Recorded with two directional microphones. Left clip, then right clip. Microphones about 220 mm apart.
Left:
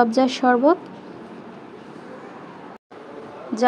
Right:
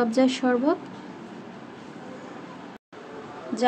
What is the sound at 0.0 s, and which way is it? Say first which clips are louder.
Speech: left 5 dB; 20° left (ahead or behind).